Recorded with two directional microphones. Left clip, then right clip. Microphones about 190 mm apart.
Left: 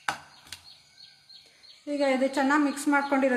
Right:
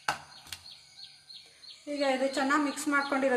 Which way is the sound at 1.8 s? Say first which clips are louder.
Left 3 dB; 30° left (ahead or behind).